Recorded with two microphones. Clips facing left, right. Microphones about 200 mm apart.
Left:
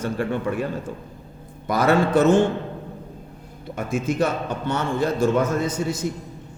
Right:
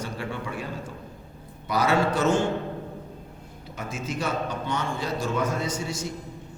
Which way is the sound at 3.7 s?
55° left (ahead or behind).